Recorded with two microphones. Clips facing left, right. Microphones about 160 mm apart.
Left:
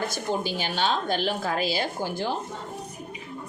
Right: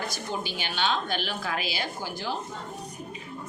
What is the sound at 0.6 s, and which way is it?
A woman's voice, 40° left (ahead or behind).